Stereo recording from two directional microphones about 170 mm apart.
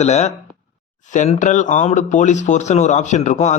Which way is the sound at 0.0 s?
40° left (ahead or behind).